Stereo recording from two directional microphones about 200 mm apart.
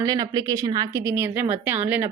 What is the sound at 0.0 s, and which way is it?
A woman's voice, 20° right (ahead or behind).